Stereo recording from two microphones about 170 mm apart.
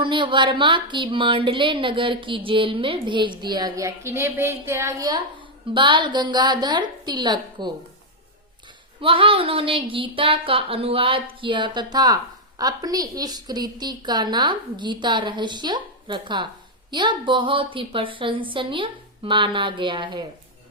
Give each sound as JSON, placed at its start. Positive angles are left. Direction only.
{"t": 0.0, "sound": "speech", "side_deg": -30}
{"t": 9.0, "sound": "speech", "side_deg": -30}